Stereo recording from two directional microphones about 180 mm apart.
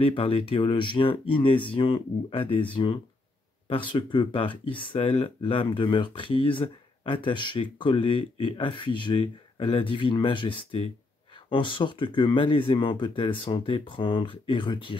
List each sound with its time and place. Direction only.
0.0 s speech: 30° left (ahead or behind)
3.6 s speech: 30° left (ahead or behind)